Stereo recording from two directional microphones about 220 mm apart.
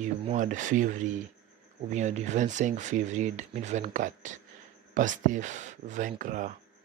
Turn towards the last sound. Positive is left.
turn(degrees=-35)  # may be behind; listen again after turning